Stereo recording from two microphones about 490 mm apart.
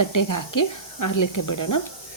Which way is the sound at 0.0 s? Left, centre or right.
Left.